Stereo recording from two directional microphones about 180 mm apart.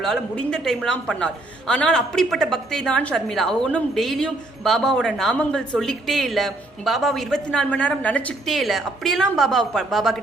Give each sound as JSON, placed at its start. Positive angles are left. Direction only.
{"t": 0.0, "sound": "a woman's voice", "side_deg": 5}